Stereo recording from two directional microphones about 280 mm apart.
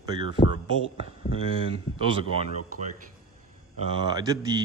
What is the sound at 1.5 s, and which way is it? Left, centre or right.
Speech, centre.